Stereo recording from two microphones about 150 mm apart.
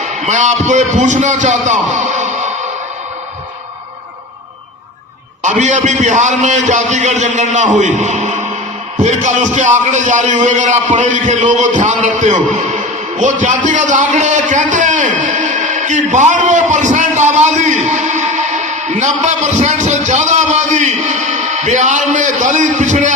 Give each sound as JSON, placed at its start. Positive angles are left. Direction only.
{"t": 0.0, "sound": "a man's voice", "side_deg": -50}
{"t": 5.4, "sound": "a man's voice", "side_deg": -55}
{"t": 15.2, "sound": "a sound", "side_deg": -55}
{"t": 17.3, "sound": "a man's voice", "side_deg": -50}